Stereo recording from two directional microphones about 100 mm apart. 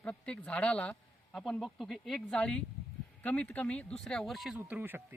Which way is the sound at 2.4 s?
10° left (ahead or behind).